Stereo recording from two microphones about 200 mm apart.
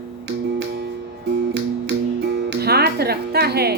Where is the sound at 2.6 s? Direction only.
55° right (ahead or behind).